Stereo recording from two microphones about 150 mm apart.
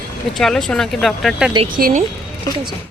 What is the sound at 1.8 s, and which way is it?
Speech, 70° right (ahead or behind).